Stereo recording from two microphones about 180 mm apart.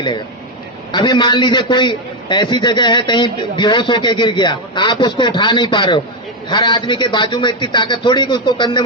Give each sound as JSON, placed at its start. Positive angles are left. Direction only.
{"t": 0.9, "sound": "a man's voice", "side_deg": 25}